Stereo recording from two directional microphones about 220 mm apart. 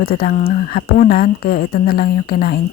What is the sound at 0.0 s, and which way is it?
Speech, 45° left (ahead or behind).